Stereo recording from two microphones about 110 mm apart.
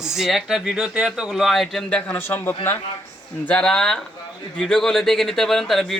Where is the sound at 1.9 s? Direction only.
20° left (ahead or behind).